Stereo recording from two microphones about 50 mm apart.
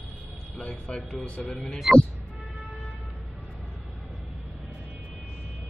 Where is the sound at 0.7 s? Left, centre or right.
Centre.